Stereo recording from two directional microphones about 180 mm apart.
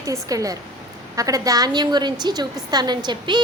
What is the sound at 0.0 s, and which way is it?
A woman's voice, 20° right (ahead or behind).